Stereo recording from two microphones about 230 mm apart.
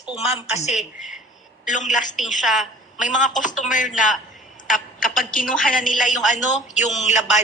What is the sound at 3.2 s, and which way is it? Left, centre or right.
Speech, left.